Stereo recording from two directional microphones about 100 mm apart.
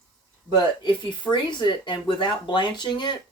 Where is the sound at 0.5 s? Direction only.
50° left (ahead or behind).